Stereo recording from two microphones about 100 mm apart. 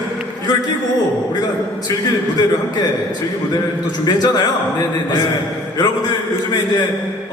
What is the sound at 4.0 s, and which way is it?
Speech, 40° left (ahead or behind).